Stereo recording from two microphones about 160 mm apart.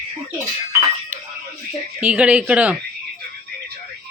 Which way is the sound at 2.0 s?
10° right (ahead or behind).